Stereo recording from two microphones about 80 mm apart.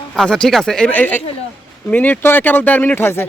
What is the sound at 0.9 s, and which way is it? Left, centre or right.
Speech, left.